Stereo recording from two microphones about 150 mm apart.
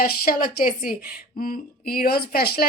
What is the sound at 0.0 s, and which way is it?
A woman's voice, 75° left (ahead or behind).